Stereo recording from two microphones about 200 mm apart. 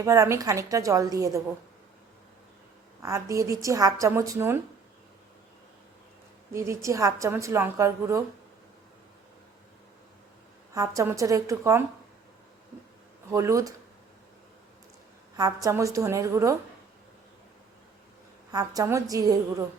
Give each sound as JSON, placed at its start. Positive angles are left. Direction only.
{"t": 0.0, "sound": "a woman's voice", "side_deg": -15}
{"t": 3.0, "sound": "a woman's voice", "side_deg": -15}
{"t": 6.5, "sound": "a woman's voice", "side_deg": -15}
{"t": 10.8, "sound": "a woman's voice", "side_deg": -15}
{"t": 13.3, "sound": "a woman's voice", "side_deg": -15}
{"t": 15.4, "sound": "a woman's voice", "side_deg": -15}
{"t": 18.5, "sound": "a woman's voice", "side_deg": -15}